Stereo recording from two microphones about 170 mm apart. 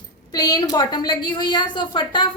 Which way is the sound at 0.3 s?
20° left (ahead or behind).